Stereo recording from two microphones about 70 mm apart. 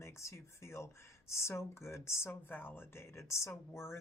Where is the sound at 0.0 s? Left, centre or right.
Left.